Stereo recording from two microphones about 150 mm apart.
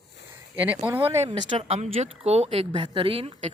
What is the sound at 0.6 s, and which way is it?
Speech, 10° right (ahead or behind).